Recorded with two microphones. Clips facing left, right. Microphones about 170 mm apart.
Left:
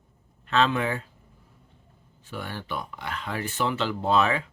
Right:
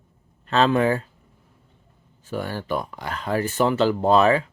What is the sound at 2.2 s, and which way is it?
Speech, 40° right (ahead or behind).